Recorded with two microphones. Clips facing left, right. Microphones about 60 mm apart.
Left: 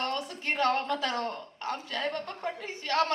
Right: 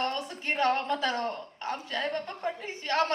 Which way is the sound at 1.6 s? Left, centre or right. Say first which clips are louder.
Even; right.